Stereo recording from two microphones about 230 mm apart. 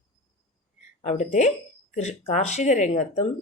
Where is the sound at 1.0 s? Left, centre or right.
Left.